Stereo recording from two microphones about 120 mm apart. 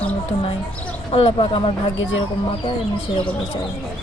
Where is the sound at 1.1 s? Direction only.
50° left (ahead or behind).